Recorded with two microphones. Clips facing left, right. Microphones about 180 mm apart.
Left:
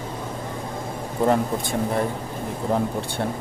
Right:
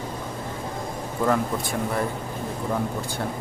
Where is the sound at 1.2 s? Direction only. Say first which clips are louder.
Left 3 dB; 25° left (ahead or behind).